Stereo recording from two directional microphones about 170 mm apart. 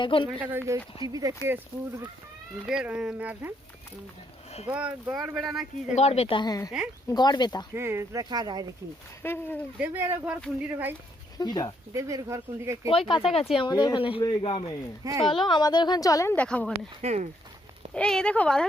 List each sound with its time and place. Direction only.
0.0 s a woman's voice: 30° left (ahead or behind)
0.3 s speech: 10° right (ahead or behind)
4.6 s speech: 5° right (ahead or behind)
5.9 s a woman's voice: 40° left (ahead or behind)
7.7 s speech: 15° right (ahead or behind)
9.2 s speech: 15° left (ahead or behind)
9.7 s speech: 10° right (ahead or behind)
11.3 s a woman's voice: 25° left (ahead or behind)
11.9 s speech: 20° right (ahead or behind)
12.9 s a woman's voice: 30° left (ahead or behind)
15.0 s speech: 20° right (ahead or behind)
15.4 s a woman's voice: 25° left (ahead or behind); by 16.7 s 5° left (ahead or behind)
17.0 s speech: 40° right (ahead or behind)
17.9 s speech: 5° left (ahead or behind)